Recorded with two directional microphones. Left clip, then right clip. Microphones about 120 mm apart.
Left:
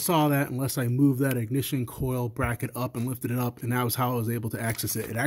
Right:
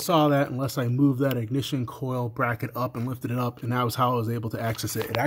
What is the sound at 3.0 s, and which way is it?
Speech, 20° left (ahead or behind).